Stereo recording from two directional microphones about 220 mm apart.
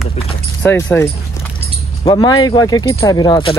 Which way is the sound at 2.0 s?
15° left (ahead or behind).